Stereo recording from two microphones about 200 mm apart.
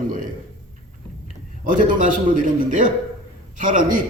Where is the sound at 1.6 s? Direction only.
40° right (ahead or behind).